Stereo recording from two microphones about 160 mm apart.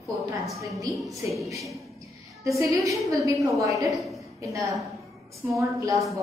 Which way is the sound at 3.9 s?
Centre (ahead or behind).